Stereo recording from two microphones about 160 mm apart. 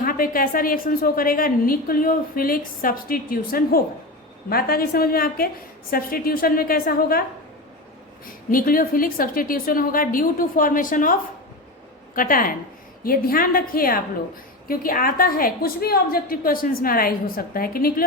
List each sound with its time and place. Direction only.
0.0 s a woman's voice: 60° left (ahead or behind)
8.4 s a woman's voice: 60° left (ahead or behind)